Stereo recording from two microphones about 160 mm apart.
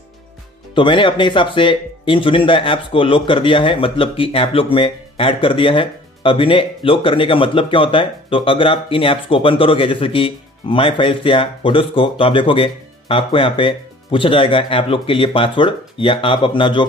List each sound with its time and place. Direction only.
0.7 s speech: 30° left (ahead or behind)